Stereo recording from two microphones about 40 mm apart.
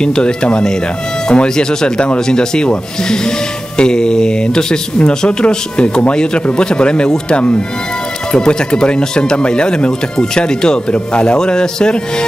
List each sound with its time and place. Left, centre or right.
0.0 s speech: left
10.9 s speech: left
11.3 s speech: centre